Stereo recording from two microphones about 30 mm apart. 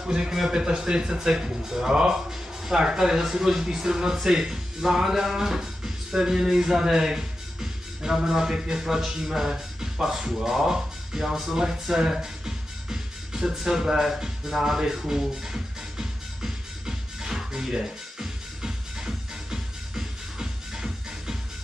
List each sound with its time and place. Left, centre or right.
0.0 s a man's voice: right; by 2.0 s centre
3.0 s speech: centre
8.8 s speech: centre
9.5 s music: centre
10.0 s speech: centre
12.2 s music: centre
13.9 s speech: centre
14.6 s music: centre